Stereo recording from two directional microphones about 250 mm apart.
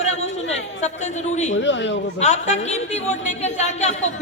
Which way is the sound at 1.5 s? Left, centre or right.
Left.